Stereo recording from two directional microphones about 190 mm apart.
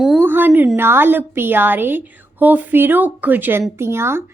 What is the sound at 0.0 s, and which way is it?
A woman's voice, centre (ahead or behind).